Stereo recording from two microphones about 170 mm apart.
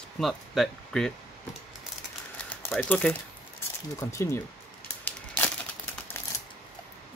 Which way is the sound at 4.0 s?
20° left (ahead or behind).